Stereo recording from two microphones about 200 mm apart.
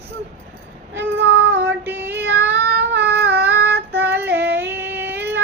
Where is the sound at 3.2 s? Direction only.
10° right (ahead or behind).